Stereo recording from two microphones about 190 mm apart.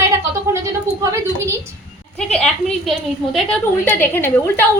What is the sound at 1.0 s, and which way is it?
Speech, 15° right (ahead or behind).